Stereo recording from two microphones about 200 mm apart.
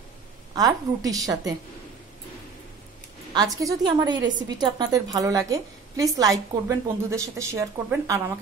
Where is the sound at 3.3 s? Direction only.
20° right (ahead or behind).